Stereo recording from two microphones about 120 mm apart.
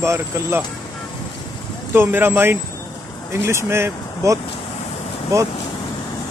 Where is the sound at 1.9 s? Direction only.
15° right (ahead or behind).